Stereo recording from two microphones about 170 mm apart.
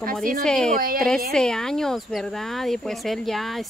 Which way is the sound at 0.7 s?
60° right (ahead or behind).